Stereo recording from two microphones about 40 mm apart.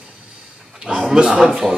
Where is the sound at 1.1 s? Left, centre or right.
Right.